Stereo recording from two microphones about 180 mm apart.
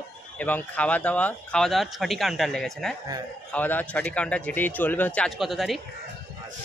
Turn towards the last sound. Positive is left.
turn(degrees=0)  # may be behind; listen again after turning